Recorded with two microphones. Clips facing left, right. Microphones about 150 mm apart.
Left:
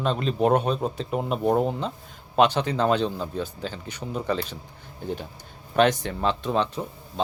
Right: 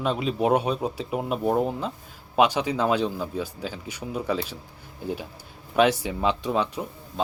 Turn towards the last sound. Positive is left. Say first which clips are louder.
# left 1 dB
turn(degrees=-10)  # may be behind; listen again after turning